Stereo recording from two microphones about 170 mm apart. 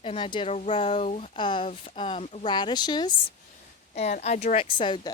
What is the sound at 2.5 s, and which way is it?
Speech, 25° left (ahead or behind).